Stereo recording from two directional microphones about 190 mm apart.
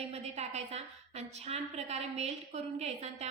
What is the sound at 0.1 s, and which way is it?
A woman's voice, 35° right (ahead or behind).